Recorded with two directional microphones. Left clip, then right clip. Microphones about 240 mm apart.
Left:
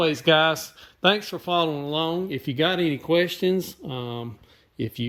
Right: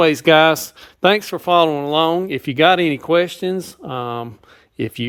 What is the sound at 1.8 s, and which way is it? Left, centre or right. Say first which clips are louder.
Speech: right 10 dB; right.